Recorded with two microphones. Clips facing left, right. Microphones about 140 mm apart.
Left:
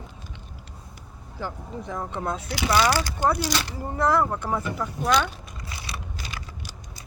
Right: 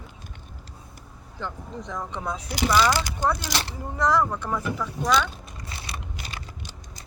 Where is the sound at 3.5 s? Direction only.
25° right (ahead or behind).